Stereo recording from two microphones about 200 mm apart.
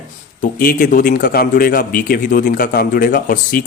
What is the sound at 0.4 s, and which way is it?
A man's voice, 45° left (ahead or behind).